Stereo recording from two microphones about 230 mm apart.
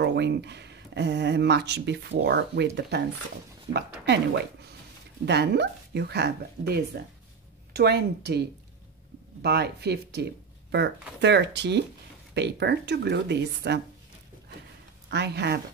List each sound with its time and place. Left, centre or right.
0.0 s speech: right
5.2 s speech: right
9.4 s speech: right
15.0 s speech: right